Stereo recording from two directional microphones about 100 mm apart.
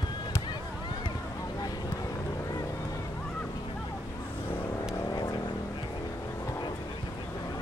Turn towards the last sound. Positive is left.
turn(degrees=45)  # may be behind; listen again after turning